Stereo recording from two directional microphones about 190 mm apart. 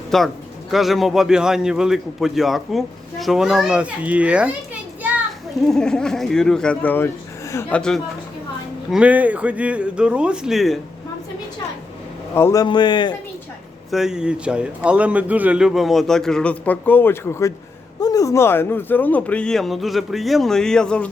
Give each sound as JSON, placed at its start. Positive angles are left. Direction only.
{"t": 0.1, "sound": "a man's voice", "side_deg": 0}
{"t": 5.6, "sound": "a man's voice", "side_deg": 5}
{"t": 7.8, "sound": "a man's voice", "side_deg": 5}
{"t": 12.3, "sound": "speech", "side_deg": 15}
{"t": 13.9, "sound": "a man's voice", "side_deg": -5}